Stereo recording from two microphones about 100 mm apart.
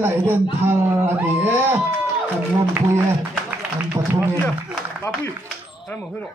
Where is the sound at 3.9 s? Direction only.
25° right (ahead or behind).